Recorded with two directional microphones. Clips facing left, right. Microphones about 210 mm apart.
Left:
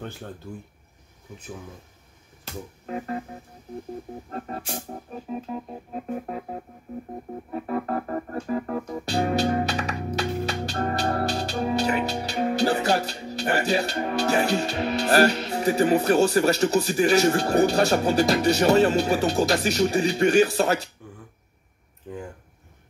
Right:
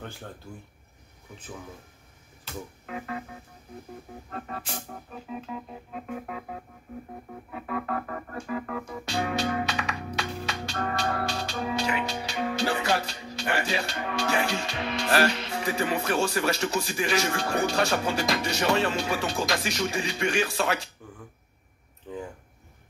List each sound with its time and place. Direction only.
2.9 s organ: 35° left (ahead or behind)